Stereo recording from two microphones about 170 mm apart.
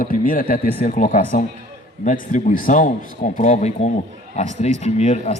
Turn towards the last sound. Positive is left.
turn(degrees=40)  # may be behind; listen again after turning